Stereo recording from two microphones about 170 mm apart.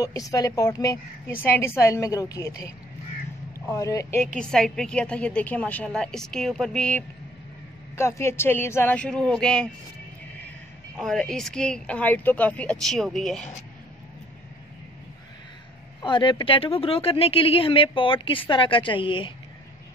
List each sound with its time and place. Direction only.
0.0 s a woman's voice: 20° left (ahead or behind)
4.4 s a woman's voice: 5° left (ahead or behind)
11.0 s a woman's voice: centre (ahead or behind)
16.0 s speech: 25° left (ahead or behind)